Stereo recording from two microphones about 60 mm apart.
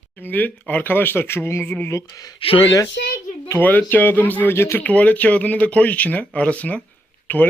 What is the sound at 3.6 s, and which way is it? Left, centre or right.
Speech, left.